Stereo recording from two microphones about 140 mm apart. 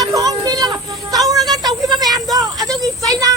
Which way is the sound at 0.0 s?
25° right (ahead or behind).